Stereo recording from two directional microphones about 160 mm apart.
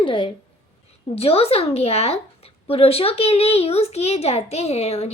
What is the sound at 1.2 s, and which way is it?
A child's voice, 40° left (ahead or behind).